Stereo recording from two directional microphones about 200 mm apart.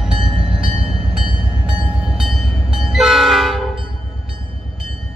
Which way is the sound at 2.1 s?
Centre (ahead or behind).